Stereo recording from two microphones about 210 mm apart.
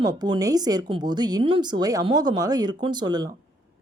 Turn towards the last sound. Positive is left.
turn(degrees=-20)  # may be behind; listen again after turning